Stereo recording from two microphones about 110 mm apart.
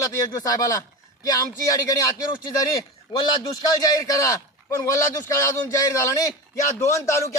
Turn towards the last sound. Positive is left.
turn(degrees=30)  # may be behind; listen again after turning